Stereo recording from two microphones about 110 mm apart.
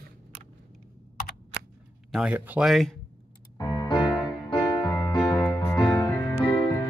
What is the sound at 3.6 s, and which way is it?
Music, 35° left (ahead or behind).